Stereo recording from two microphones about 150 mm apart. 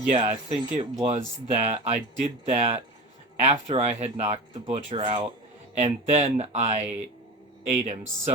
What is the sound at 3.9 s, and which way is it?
Speech, 45° right (ahead or behind).